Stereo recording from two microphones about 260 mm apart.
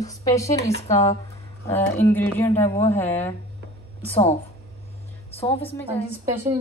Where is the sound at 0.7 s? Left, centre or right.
Left.